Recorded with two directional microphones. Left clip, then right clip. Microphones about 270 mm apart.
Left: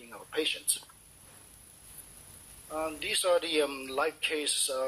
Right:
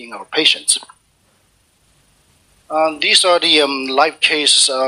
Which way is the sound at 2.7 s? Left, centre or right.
Right.